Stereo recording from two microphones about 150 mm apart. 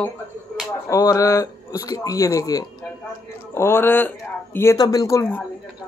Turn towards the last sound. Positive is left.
turn(degrees=15)  # may be behind; listen again after turning